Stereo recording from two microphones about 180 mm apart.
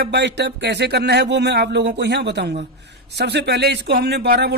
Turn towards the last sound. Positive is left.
turn(degrees=-65)  # may be behind; listen again after turning